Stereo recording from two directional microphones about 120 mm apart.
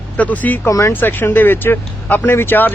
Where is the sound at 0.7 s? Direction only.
25° left (ahead or behind).